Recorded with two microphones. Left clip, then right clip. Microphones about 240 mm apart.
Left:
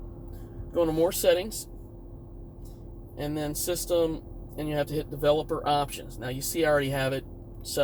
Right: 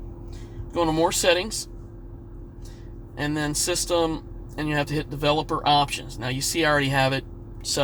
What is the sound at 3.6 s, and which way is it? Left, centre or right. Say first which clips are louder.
Speech: right 2 dB; right.